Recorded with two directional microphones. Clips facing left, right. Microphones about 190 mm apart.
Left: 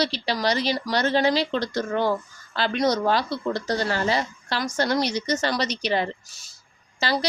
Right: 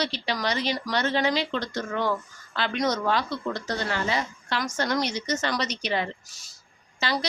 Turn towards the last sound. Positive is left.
turn(degrees=35)  # may be behind; listen again after turning